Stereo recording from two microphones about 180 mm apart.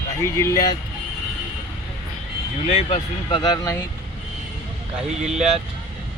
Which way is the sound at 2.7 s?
40° left (ahead or behind).